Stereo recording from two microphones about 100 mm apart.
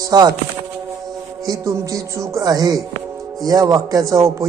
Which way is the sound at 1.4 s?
35° right (ahead or behind).